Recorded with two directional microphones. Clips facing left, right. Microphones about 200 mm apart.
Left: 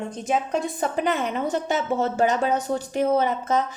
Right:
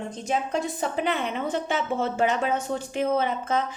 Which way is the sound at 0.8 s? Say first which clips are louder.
Left 2 dB; 45° left (ahead or behind).